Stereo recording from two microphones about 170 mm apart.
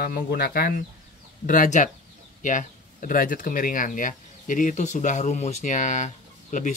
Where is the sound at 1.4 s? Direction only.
50° left (ahead or behind).